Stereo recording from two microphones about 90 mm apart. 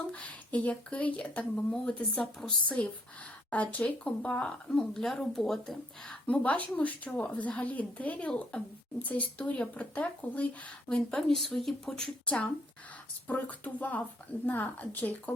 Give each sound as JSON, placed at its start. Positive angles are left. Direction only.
{"t": 0.1, "sound": "speech", "side_deg": 15}
{"t": 6.2, "sound": "speech", "side_deg": 15}